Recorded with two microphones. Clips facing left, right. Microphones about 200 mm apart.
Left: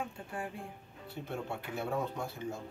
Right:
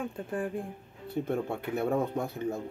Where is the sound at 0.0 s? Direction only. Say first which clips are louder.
Right 7 dB; 50° right (ahead or behind).